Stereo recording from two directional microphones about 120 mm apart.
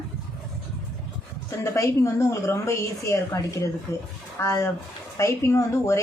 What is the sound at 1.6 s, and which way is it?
Speech, 25° left (ahead or behind).